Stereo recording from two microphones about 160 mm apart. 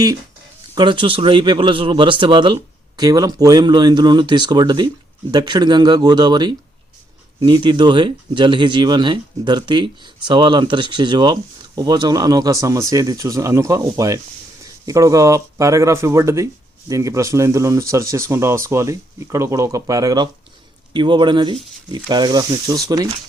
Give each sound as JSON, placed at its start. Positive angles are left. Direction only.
{"t": 0.8, "sound": "speech", "side_deg": -30}